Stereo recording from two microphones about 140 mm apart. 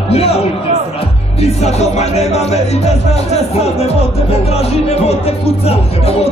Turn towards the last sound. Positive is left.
turn(degrees=50)  # may be behind; listen again after turning